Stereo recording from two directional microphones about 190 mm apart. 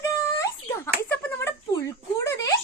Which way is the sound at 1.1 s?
15° left (ahead or behind).